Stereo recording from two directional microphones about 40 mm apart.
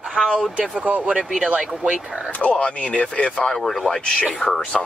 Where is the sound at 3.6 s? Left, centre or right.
Centre.